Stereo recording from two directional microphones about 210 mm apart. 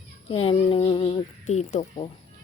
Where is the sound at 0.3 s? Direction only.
25° left (ahead or behind).